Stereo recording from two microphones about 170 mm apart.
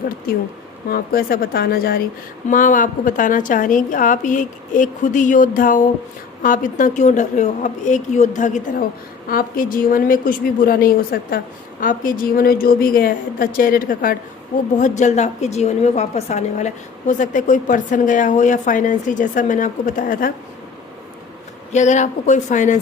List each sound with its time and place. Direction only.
0.9 s a woman's voice: 60° left (ahead or behind)
2.5 s a woman's voice: 50° left (ahead or behind)
14.8 s a woman's voice: 45° left (ahead or behind)
21.7 s a woman's voice: 45° left (ahead or behind)